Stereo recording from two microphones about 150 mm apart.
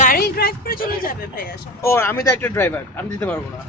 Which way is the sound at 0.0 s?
80° left.